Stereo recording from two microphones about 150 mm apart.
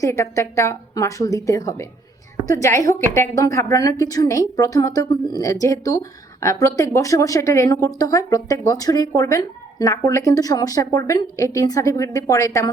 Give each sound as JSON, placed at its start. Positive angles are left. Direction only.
{"t": 0.0, "sound": "a woman's voice", "side_deg": 20}